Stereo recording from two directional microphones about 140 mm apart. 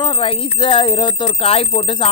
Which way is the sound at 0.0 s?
40° left (ahead or behind).